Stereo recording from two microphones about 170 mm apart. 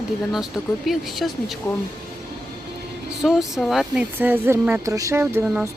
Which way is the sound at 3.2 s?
Centre (ahead or behind).